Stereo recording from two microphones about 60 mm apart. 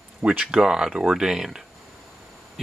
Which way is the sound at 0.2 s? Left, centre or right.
Right.